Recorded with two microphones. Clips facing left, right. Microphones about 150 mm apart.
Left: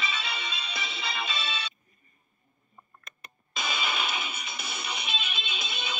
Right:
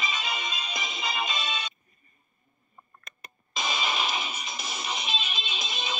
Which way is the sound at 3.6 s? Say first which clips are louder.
Right 2 dB; 35° right (ahead or behind).